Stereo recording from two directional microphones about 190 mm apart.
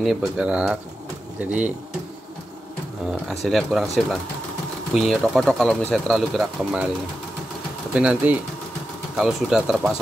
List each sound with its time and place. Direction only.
0.0 s speech: centre (ahead or behind)
3.1 s speech: centre (ahead or behind)
7.9 s speech: 5° right (ahead or behind)